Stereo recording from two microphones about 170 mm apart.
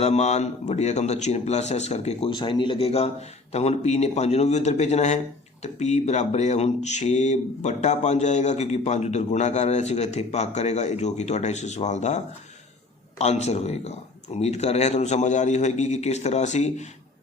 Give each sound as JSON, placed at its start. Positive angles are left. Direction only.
{"t": 0.0, "sound": "speech", "side_deg": 40}